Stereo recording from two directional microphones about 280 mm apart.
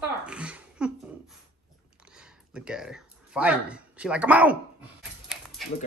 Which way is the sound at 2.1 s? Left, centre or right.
Centre.